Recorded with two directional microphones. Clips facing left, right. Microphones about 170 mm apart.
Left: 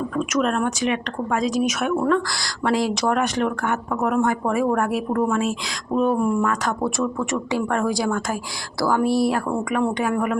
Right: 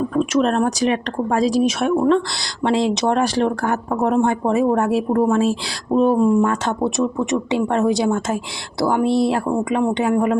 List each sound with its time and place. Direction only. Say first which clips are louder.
0.1 s speech: right 3 dB; 30° right (ahead or behind)